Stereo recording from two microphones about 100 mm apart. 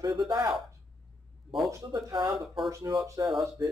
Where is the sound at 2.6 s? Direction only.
35° right (ahead or behind).